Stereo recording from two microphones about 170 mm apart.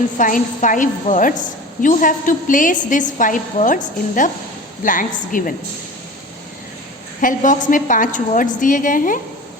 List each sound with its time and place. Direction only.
0.2 s a woman's voice: 50° left (ahead or behind)
7.2 s a woman's voice: 50° left (ahead or behind)